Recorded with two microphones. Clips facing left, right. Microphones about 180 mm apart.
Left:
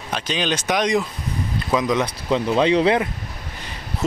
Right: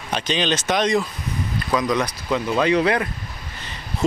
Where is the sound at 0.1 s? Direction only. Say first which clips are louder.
Right 1 dB; 5° left (ahead or behind); by 3.1 s 25° left (ahead or behind).